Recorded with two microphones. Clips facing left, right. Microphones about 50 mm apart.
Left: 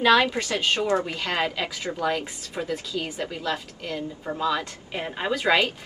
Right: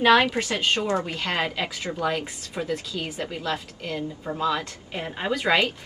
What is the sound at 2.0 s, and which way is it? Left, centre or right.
A woman's voice, centre.